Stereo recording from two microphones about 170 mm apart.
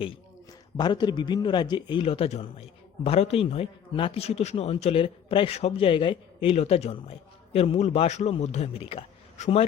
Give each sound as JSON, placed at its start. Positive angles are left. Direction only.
{"t": 0.8, "sound": "a man's voice", "side_deg": 25}